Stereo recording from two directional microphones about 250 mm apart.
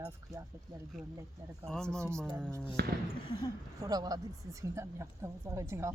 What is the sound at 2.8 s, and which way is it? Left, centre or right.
Speech, right.